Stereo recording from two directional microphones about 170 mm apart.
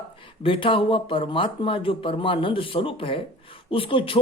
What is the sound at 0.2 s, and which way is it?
Speech, 30° left (ahead or behind).